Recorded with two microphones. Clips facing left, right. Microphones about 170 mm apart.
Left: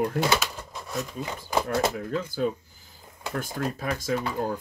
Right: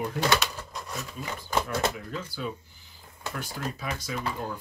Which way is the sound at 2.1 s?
45° left (ahead or behind).